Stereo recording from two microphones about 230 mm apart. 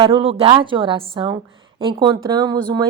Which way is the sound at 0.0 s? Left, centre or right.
Right.